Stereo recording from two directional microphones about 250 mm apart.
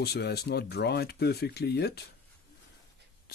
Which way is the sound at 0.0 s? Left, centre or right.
Left.